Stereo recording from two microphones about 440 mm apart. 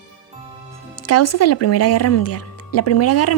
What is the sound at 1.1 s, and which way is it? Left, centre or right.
A woman's voice, left.